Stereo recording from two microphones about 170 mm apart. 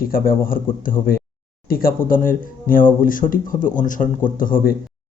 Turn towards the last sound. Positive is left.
turn(degrees=55)  # may be behind; listen again after turning